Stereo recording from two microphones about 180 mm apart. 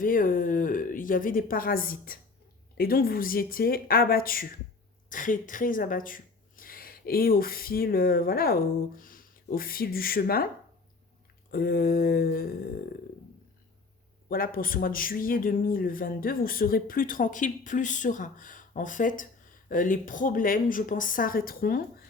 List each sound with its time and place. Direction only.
0.0 s a woman's voice: 50° left (ahead or behind)
11.5 s speech: 55° left (ahead or behind)
14.3 s speech: 55° left (ahead or behind)